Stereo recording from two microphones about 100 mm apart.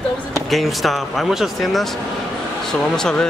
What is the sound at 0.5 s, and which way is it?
A man's voice, centre (ahead or behind).